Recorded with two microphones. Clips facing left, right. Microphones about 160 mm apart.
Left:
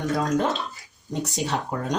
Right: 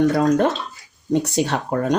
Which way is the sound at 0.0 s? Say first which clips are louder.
Right 7 dB; 60° right (ahead or behind).